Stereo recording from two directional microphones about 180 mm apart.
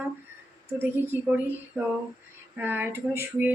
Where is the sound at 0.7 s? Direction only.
10° right (ahead or behind).